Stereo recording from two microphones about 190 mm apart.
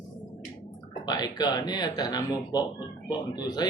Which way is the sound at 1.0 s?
20° left (ahead or behind).